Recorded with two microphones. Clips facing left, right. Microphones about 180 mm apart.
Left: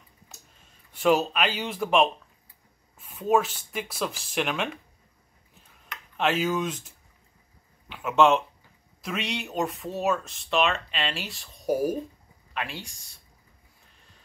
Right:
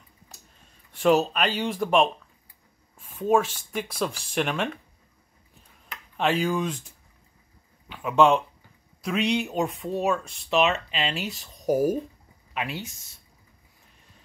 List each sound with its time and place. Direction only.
0.9 s speech: 5° left (ahead or behind)
5.9 s a sound: centre (ahead or behind)
7.9 s speech: centre (ahead or behind)
11.6 s speech: 40° right (ahead or behind)
12.5 s speech: 5° right (ahead or behind)